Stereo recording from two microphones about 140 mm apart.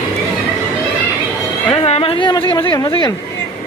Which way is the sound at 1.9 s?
45° left (ahead or behind).